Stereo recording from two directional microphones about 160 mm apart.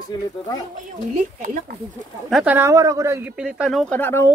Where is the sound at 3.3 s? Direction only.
5° right (ahead or behind); by 4.2 s 15° left (ahead or behind).